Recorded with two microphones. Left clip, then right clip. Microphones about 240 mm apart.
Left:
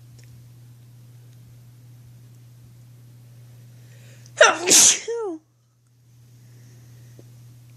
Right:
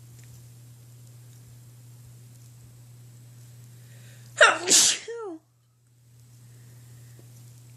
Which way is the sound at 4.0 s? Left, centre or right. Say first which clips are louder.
Left 3 dB; left.